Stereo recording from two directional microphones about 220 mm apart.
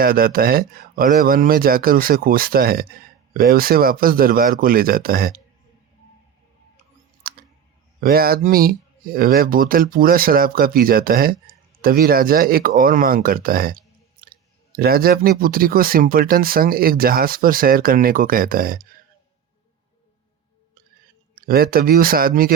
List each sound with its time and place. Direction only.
0.0 s speech: 40° right (ahead or behind)
7.2 s typing: 40° right (ahead or behind)
8.0 s speech: 45° right (ahead or behind)
21.3 s speech: 40° right (ahead or behind)